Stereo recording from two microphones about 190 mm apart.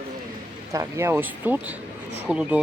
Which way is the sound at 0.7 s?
15° right (ahead or behind).